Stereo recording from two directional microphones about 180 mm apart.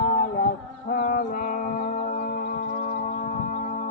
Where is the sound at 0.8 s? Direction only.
50° left (ahead or behind).